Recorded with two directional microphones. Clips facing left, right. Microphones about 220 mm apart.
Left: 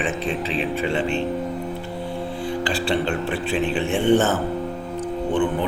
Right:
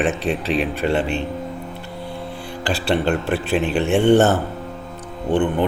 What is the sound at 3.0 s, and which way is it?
Speech, 60° right (ahead or behind).